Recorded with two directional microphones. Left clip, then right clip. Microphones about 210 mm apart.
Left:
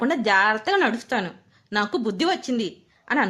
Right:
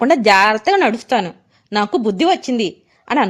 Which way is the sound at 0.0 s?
35° right (ahead or behind).